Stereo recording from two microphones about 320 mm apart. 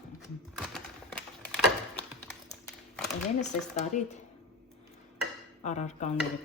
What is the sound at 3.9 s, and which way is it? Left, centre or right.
Speech, left.